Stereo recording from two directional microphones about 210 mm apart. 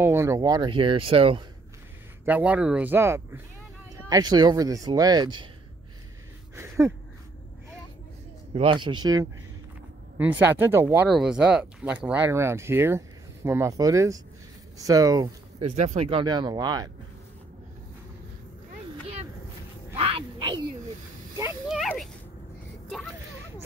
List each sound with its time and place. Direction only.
0.0 s speech: 10° right (ahead or behind)
2.2 s speech: 5° right (ahead or behind)
6.5 s a sound: 10° right (ahead or behind)
8.5 s speech: 20° right (ahead or behind)
15.7 s speech: 35° right (ahead or behind)
20.0 s speech: 25° right (ahead or behind)
21.6 s a sound: centre (ahead or behind)